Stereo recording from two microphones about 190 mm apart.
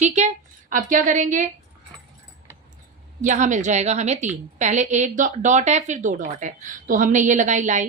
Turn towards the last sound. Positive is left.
turn(degrees=-40)  # may be behind; listen again after turning